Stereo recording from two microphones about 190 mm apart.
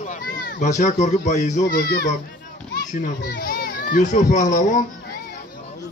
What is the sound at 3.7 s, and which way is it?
Children playing, 60° left (ahead or behind).